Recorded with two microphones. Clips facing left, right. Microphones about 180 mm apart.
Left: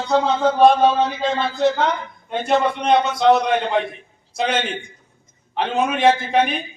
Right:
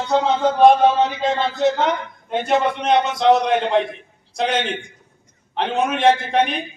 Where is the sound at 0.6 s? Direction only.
20° right (ahead or behind).